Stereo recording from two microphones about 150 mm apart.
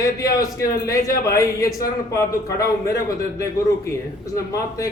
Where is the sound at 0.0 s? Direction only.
20° left (ahead or behind).